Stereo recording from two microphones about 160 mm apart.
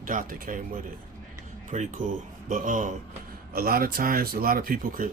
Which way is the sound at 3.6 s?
65° right (ahead or behind).